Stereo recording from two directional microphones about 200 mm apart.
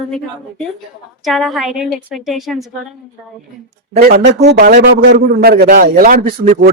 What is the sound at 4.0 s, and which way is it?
A man's voice, 45° right (ahead or behind).